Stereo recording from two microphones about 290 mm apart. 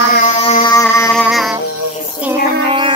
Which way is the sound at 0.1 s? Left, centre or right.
Left.